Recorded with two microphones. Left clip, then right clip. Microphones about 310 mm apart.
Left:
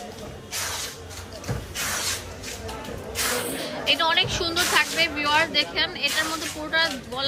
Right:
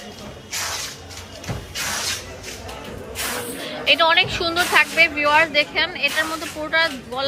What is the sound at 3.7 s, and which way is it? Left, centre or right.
A woman's voice, centre.